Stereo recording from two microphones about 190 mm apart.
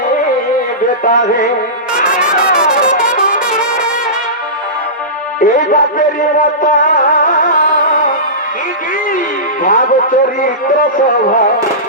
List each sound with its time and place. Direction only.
1.0 s a man's voice: 45° left (ahead or behind)
2.3 s brass instrument: 45° left (ahead or behind)
5.4 s speech: 45° left (ahead or behind)
6.6 s music: 45° left (ahead or behind)
9.6 s a man's voice: 45° left (ahead or behind)